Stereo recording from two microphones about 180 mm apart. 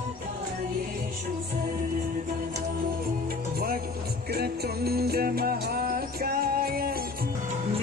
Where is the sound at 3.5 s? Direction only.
55° right (ahead or behind).